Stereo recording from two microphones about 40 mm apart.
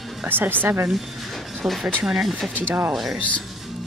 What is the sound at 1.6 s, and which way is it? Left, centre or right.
Speech, centre.